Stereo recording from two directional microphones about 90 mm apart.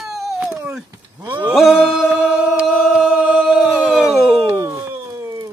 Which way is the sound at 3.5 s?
Centre (ahead or behind).